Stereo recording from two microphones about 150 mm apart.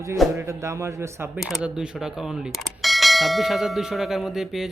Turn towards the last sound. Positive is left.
turn(degrees=0)  # may be behind; listen again after turning